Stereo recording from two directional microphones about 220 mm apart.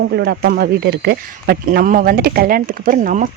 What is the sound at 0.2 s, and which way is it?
Speech, 45° right (ahead or behind).